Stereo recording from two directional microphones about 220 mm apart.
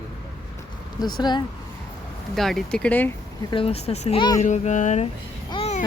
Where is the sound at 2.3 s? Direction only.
Centre (ahead or behind).